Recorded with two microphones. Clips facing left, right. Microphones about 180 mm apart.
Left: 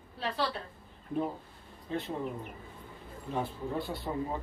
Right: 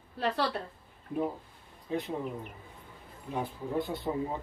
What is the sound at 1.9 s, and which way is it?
Speech, 10° right (ahead or behind).